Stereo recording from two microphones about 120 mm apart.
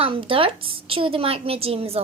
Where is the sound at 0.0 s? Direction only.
50° right (ahead or behind).